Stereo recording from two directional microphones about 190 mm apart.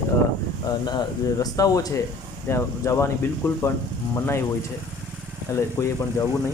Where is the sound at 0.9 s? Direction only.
20° left (ahead or behind).